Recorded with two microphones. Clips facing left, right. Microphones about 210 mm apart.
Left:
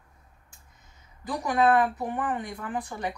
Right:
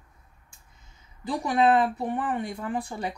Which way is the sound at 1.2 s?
25° right (ahead or behind).